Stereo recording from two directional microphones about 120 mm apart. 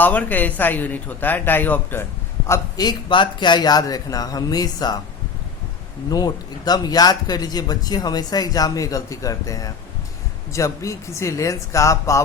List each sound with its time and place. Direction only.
0.0 s speech: 15° left (ahead or behind)
2.5 s a man's voice: 30° left (ahead or behind)
6.1 s a man's voice: 30° left (ahead or behind)